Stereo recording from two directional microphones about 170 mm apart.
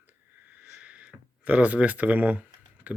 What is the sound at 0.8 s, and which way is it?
Speech, 5° right (ahead or behind).